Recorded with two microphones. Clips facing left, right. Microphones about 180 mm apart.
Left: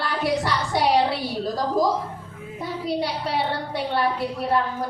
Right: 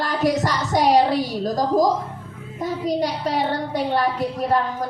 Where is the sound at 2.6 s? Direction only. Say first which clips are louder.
Right 4 dB; 45° right (ahead or behind).